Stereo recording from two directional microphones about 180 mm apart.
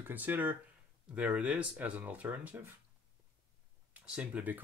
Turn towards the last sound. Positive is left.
turn(degrees=-10)  # may be behind; listen again after turning